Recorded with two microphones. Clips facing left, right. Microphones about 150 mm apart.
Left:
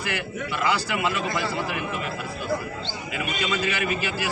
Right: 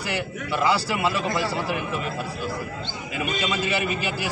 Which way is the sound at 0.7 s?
35° right (ahead or behind).